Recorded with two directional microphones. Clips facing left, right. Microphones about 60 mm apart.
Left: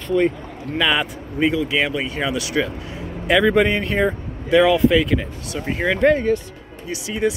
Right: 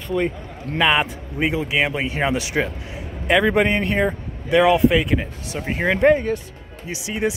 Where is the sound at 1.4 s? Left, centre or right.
Centre.